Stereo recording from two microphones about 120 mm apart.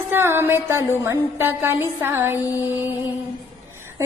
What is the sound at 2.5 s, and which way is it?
Music, 15° right (ahead or behind).